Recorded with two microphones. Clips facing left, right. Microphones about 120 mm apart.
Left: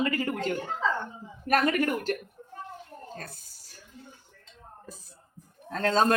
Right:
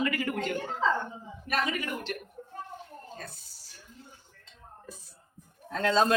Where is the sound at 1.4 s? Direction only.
50° left (ahead or behind).